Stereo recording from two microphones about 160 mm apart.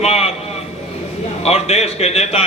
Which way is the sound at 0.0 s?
40° left (ahead or behind).